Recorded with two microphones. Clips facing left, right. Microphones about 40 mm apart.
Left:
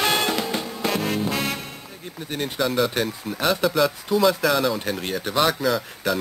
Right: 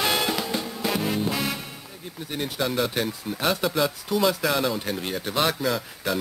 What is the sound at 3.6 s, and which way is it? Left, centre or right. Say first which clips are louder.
Speech: left 4 dB; centre.